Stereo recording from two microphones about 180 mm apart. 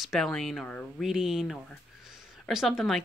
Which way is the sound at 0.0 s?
Centre (ahead or behind).